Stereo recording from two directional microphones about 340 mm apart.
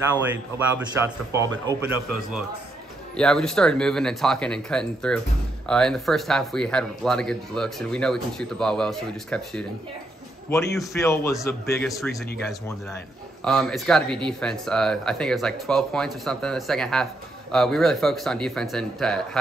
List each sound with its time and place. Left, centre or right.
1.3 s a man's voice: centre